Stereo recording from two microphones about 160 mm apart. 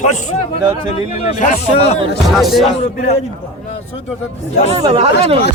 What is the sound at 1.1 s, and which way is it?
Speech, 45° left (ahead or behind).